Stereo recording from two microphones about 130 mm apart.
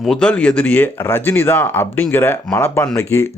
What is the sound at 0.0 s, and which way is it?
Speech, 5° left (ahead or behind).